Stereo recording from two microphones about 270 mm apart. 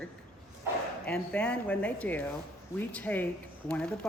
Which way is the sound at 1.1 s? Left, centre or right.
Centre.